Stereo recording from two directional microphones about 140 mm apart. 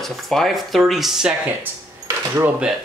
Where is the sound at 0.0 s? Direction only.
Centre (ahead or behind).